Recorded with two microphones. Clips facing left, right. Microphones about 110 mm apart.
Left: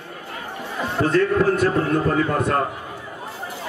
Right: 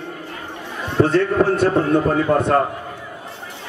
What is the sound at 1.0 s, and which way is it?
Speech, 30° right (ahead or behind).